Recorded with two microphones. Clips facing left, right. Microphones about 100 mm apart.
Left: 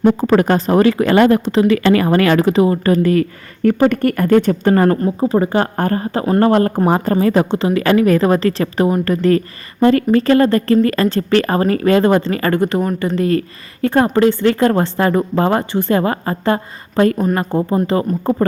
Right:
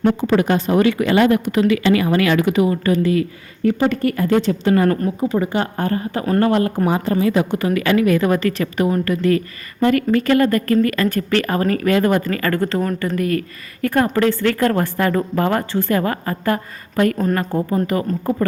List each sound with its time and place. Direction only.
0.2 s speech: 45° left (ahead or behind)
1.5 s speech: 30° left (ahead or behind)
1.7 s speech: 45° left (ahead or behind)
4.9 s speech: 25° left (ahead or behind)
5.3 s speech: 40° left (ahead or behind)
6.1 s speech: 20° left (ahead or behind)
6.4 s a woman's voice: 40° left (ahead or behind)
7.5 s a woman's voice: 25° left (ahead or behind)